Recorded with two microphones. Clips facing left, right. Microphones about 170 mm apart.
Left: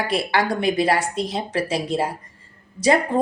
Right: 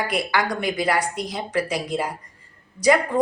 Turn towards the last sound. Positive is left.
turn(degrees=25)  # may be behind; listen again after turning